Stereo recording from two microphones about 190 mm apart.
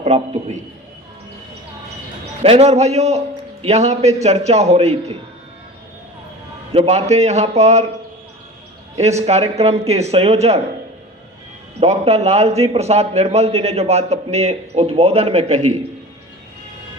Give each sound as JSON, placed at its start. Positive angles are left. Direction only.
{"t": 0.0, "sound": "a man's voice", "side_deg": -35}
{"t": 2.4, "sound": "a man's voice", "side_deg": -30}
{"t": 6.7, "sound": "a man's voice", "side_deg": -35}
{"t": 9.0, "sound": "a man's voice", "side_deg": -35}
{"t": 11.8, "sound": "a man's voice", "side_deg": -35}